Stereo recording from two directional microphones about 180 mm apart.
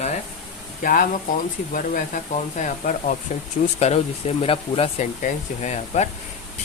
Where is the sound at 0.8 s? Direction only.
50° left (ahead or behind).